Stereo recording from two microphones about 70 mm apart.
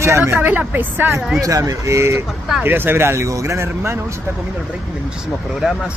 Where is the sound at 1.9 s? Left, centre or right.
Right.